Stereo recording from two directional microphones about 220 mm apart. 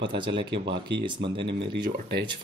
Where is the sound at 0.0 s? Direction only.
20° right (ahead or behind).